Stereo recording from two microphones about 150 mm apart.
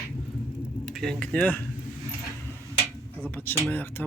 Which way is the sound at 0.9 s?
5° left (ahead or behind).